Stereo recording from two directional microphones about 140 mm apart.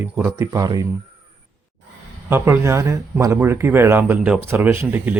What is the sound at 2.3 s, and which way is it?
Speech, 20° right (ahead or behind).